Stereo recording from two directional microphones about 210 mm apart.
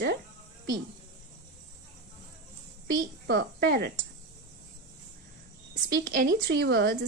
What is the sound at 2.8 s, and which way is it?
A woman's voice, 50° right (ahead or behind).